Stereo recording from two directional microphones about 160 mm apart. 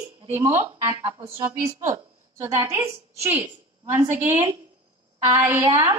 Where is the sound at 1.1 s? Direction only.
35° right (ahead or behind).